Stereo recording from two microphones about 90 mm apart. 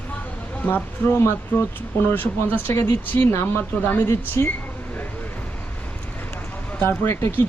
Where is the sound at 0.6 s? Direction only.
25° left (ahead or behind).